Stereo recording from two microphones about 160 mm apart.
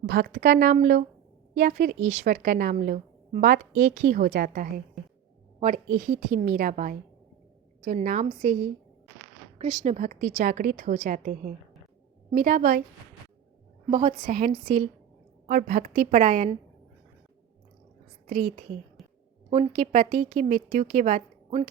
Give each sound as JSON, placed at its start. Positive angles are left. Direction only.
{"t": 0.0, "sound": "a woman's voice", "side_deg": -55}
{"t": 4.3, "sound": "a woman's voice", "side_deg": -65}
{"t": 5.5, "sound": "a woman's voice", "side_deg": -50}
{"t": 9.8, "sound": "a woman's voice", "side_deg": -50}
{"t": 13.9, "sound": "a woman's voice", "side_deg": -30}
{"t": 14.2, "sound": "a woman's voice", "side_deg": -50}
{"t": 19.5, "sound": "a woman's voice", "side_deg": -35}
{"t": 19.8, "sound": "a woman's voice", "side_deg": -60}